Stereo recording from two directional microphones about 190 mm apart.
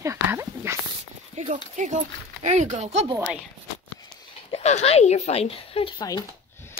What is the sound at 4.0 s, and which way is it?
A woman's voice, 30° left (ahead or behind).